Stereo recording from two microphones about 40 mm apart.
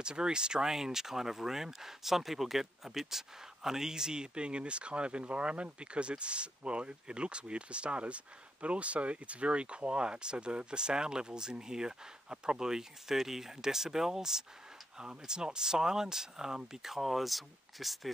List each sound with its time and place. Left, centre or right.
0.0 s speech: right; by 18.1 s centre